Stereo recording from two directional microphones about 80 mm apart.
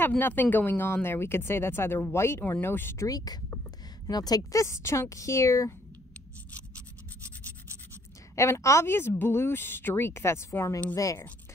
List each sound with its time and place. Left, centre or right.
0.2 s speech: left
3.1 s a woman's voice: left
8.4 s a woman's voice: left